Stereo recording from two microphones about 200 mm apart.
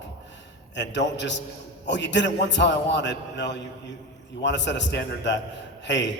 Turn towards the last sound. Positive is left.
turn(degrees=60)  # may be behind; listen again after turning